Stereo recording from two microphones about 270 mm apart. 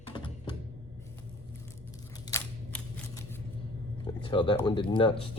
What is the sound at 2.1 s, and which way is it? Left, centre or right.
Scissors, centre.